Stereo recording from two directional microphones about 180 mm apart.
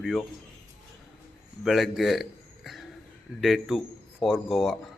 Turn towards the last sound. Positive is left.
turn(degrees=0)  # may be behind; listen again after turning